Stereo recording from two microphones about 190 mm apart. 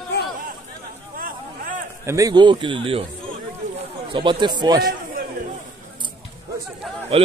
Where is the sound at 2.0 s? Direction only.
15° right (ahead or behind).